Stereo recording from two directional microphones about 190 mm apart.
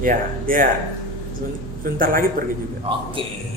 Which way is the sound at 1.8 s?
50° right (ahead or behind).